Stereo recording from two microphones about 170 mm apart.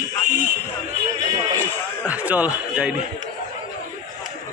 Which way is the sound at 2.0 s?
10° right (ahead or behind).